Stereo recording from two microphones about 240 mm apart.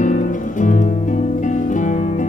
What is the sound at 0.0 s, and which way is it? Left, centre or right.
Music, left.